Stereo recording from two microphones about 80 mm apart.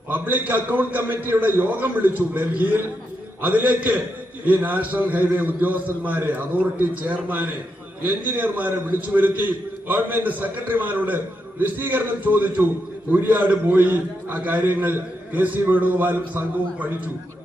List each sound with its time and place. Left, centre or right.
0.1 s a man's voice: right